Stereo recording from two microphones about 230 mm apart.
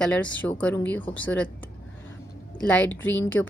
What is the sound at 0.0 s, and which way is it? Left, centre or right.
A woman's voice, centre.